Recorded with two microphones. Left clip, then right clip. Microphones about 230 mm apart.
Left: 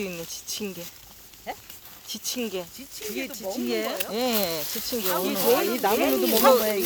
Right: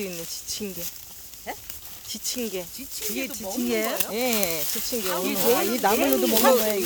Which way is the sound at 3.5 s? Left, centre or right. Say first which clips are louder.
Right 2 dB; right.